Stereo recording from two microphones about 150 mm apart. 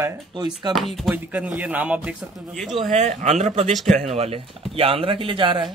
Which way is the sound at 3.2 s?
50° right (ahead or behind).